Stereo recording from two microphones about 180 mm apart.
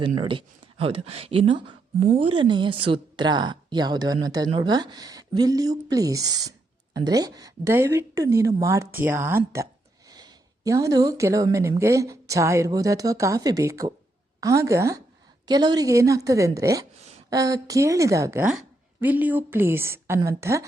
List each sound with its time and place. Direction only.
0.0 s a woman's voice: 30° right (ahead or behind)
17.0 s a sound: 35° right (ahead or behind)
17.2 s a woman's voice: 20° right (ahead or behind)